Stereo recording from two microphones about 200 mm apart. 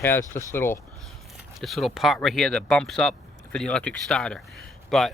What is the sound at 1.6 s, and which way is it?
Speech, centre (ahead or behind).